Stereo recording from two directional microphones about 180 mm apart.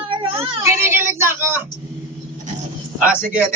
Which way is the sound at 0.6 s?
15° right (ahead or behind).